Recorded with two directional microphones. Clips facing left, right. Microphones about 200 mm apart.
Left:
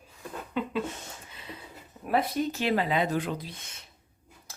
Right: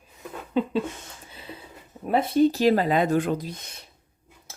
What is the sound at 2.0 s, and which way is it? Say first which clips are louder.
Speech: right 7 dB; 25° right (ahead or behind).